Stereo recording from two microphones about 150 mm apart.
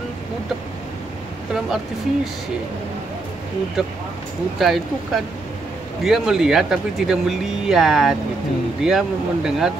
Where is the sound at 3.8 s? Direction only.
Centre (ahead or behind).